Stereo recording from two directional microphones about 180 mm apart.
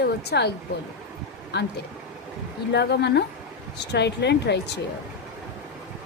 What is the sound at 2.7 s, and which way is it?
A woman's voice, 70° left (ahead or behind).